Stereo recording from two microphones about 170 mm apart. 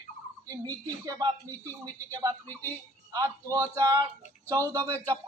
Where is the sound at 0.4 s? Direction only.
20° right (ahead or behind).